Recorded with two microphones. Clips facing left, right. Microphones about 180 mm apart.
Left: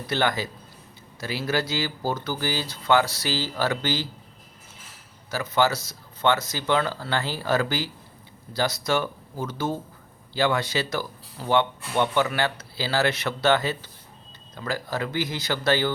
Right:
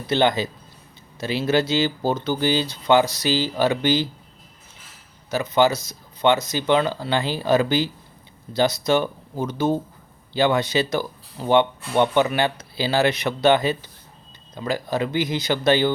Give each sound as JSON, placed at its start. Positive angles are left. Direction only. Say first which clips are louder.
{"t": 0.1, "sound": "speech", "louder": "right 6 dB", "side_deg": -20}
{"t": 5.3, "sound": "speech", "louder": "right 4 dB", "side_deg": -20}